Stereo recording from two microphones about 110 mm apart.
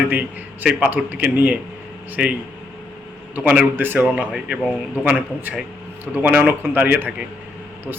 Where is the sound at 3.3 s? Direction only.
10° right (ahead or behind).